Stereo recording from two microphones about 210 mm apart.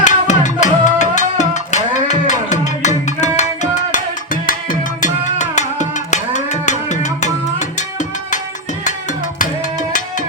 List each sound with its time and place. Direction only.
0.0 s music: 35° left (ahead or behind)